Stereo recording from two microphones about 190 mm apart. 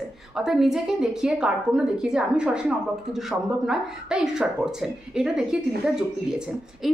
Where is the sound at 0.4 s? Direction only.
Centre (ahead or behind).